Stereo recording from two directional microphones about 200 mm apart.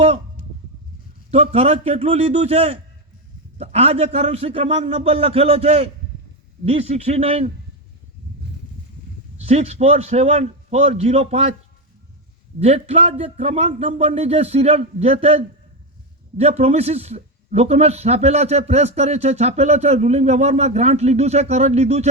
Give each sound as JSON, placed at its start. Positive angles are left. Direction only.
{"t": 1.3, "sound": "a man's voice", "side_deg": -30}
{"t": 9.5, "sound": "a man's voice", "side_deg": -30}
{"t": 12.5, "sound": "a man's voice", "side_deg": -30}